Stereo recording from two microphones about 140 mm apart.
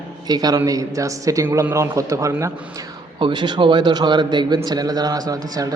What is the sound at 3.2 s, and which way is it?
A man's voice, 35° right (ahead or behind).